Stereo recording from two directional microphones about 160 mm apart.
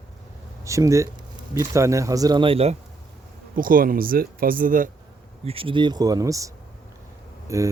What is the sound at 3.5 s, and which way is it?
Speech, 60° right (ahead or behind).